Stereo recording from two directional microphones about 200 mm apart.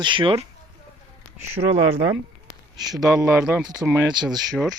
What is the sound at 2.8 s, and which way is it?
Speech, 20° right (ahead or behind).